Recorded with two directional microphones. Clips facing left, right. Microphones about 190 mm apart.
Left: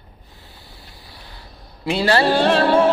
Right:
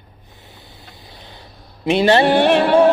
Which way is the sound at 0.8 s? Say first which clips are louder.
Right 3 dB; 20° right (ahead or behind).